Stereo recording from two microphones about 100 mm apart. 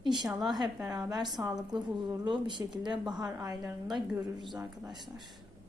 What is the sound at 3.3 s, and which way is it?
Speech, 35° right (ahead or behind).